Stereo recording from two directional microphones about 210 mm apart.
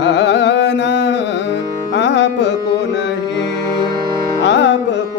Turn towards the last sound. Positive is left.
turn(degrees=55)  # may be behind; listen again after turning